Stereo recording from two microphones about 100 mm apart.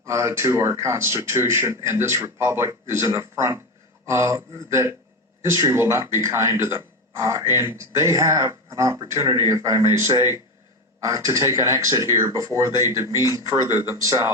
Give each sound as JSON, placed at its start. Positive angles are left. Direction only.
{"t": 0.0, "sound": "speech", "side_deg": -30}